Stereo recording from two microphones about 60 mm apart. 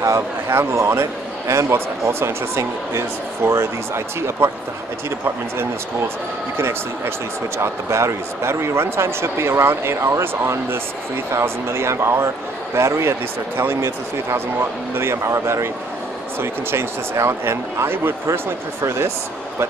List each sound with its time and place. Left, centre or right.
0.0 s speech: right
0.6 s speech: right
7.5 s speech: right